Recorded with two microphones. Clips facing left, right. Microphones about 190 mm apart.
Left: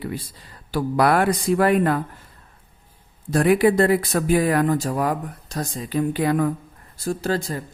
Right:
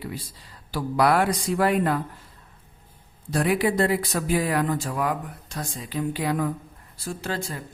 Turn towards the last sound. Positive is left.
turn(degrees=40)  # may be behind; listen again after turning